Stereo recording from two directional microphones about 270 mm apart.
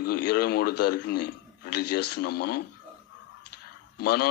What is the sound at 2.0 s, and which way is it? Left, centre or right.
Speech, left.